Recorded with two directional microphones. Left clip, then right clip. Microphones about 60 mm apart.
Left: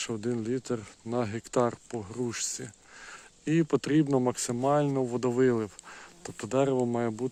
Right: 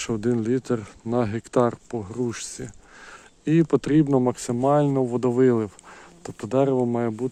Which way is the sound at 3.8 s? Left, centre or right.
Centre.